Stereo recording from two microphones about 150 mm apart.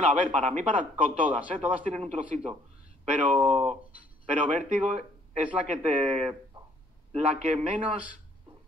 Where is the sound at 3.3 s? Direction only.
50° right (ahead or behind).